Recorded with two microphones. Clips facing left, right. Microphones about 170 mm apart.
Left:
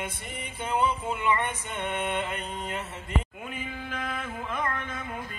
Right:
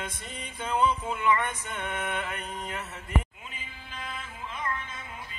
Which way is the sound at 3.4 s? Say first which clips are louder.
Left 10 dB; 60° left (ahead or behind).